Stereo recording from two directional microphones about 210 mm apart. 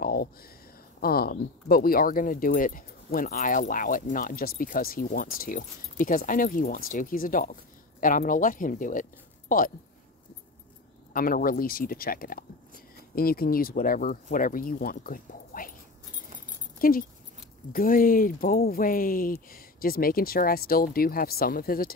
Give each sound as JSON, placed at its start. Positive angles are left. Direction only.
{"t": 0.0, "sound": "a sound", "side_deg": 45}
{"t": 1.0, "sound": "speech", "side_deg": 45}
{"t": 11.1, "sound": "speech", "side_deg": 40}
{"t": 16.8, "sound": "speech", "side_deg": 45}